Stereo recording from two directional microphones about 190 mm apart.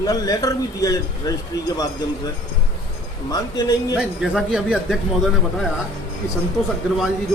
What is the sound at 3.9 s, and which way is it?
A man's voice, 5° right (ahead or behind).